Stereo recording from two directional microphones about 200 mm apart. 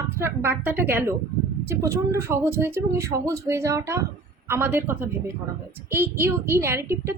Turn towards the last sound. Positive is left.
turn(degrees=-15)  # may be behind; listen again after turning